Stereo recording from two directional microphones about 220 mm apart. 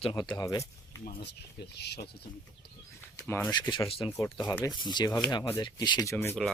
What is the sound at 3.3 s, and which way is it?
Speech, 15° left (ahead or behind).